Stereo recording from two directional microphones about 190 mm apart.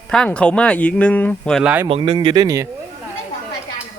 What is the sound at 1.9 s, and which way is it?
Speech, 30° right (ahead or behind).